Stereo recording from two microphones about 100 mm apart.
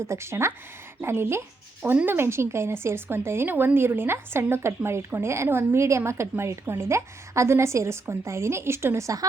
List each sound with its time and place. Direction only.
0.1 s a woman's voice: 25° right (ahead or behind)